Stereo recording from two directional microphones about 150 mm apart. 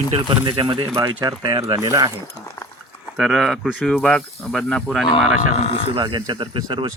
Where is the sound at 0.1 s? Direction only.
35° right (ahead or behind).